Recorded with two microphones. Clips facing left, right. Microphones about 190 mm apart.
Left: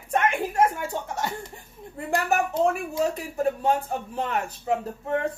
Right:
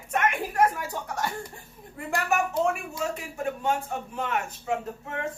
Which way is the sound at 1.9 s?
35° left (ahead or behind).